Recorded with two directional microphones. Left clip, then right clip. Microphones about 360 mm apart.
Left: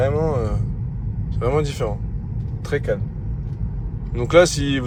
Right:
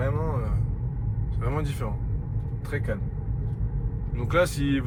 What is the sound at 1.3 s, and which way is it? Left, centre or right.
Speech, centre.